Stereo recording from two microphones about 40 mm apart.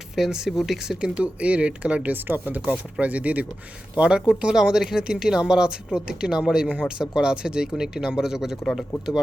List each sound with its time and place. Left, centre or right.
0.2 s speech: centre
1.1 s speech: right
2.1 s speech: right
3.9 s speech: right